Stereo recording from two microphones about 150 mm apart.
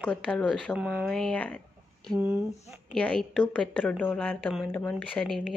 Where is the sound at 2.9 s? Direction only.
5° left (ahead or behind).